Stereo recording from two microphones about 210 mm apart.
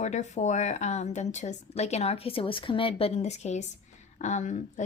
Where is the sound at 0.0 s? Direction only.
35° left (ahead or behind).